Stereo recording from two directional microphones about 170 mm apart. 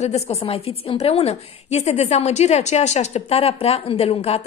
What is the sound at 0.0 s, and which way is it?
A woman's voice, 40° left (ahead or behind).